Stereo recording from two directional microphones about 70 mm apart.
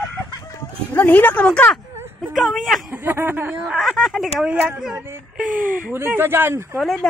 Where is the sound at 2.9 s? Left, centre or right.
Right.